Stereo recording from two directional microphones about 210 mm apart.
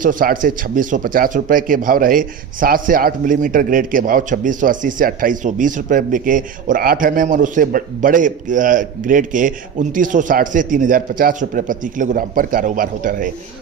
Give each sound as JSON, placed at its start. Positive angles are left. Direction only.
{"t": 0.0, "sound": "a man's voice", "side_deg": -40}